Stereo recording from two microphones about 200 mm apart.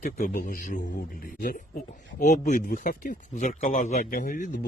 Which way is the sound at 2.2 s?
35° left (ahead or behind).